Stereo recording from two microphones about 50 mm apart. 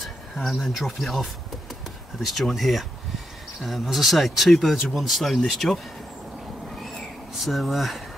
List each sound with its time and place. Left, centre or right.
0.0 s speech: centre
7.3 s speech: centre